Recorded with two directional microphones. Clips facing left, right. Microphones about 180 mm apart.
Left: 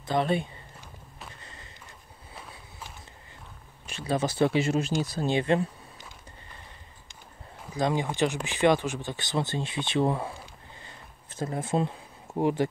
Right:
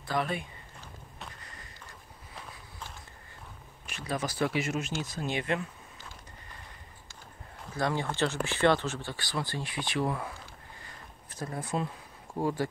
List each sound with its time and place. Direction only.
0.0 s speech: 25° left (ahead or behind)
1.4 s a sound: 25° left (ahead or behind)
3.9 s speech: 30° left (ahead or behind)
7.7 s speech: 15° left (ahead or behind)
10.8 s a sound: 25° left (ahead or behind)
12.4 s speech: 20° left (ahead or behind)